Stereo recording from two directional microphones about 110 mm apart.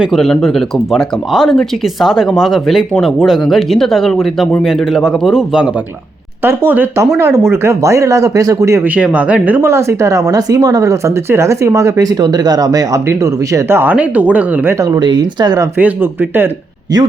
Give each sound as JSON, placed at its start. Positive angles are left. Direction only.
{"t": 0.0, "sound": "speech", "side_deg": 0}
{"t": 6.4, "sound": "speech", "side_deg": -20}
{"t": 9.0, "sound": "speech", "side_deg": -10}
{"t": 14.8, "sound": "speech", "side_deg": -40}
{"t": 15.8, "sound": "speech", "side_deg": -20}